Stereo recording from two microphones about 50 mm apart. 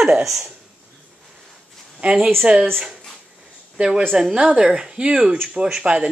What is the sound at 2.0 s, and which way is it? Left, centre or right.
Speech, centre.